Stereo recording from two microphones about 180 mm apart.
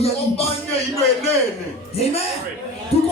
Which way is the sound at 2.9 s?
35° left (ahead or behind).